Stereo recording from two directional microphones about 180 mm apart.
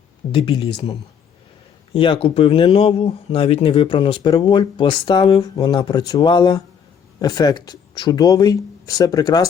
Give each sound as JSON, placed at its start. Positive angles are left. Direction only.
{"t": 0.3, "sound": "speech", "side_deg": 25}